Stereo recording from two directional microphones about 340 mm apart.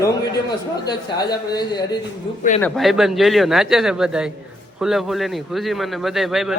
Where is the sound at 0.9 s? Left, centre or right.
Centre.